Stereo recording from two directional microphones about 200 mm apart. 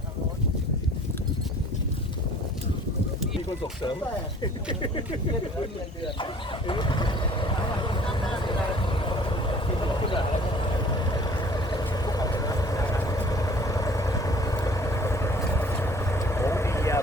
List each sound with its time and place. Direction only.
4.7 s speech: 25° left (ahead or behind)
6.7 s vehicle: 25° left (ahead or behind)
9.8 s boat: 25° left (ahead or behind)
10.9 s vehicle: 20° left (ahead or behind)